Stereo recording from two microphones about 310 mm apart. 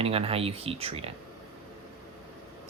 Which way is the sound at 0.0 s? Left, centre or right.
Centre.